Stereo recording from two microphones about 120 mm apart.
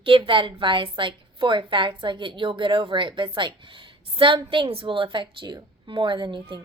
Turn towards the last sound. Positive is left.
turn(degrees=-40)  # may be behind; listen again after turning